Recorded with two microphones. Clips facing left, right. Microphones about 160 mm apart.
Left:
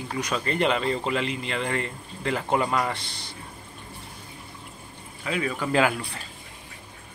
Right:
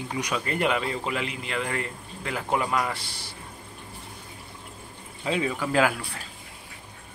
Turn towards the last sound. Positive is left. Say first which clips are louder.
# left 1 dB
turn(degrees=-5)  # may be behind; listen again after turning